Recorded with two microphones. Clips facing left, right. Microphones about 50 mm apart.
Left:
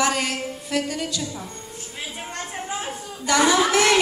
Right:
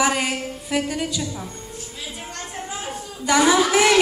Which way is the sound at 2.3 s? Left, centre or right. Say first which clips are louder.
Left 3 dB; centre.